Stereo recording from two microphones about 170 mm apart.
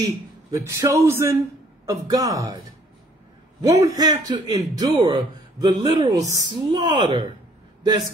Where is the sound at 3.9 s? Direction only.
20° right (ahead or behind).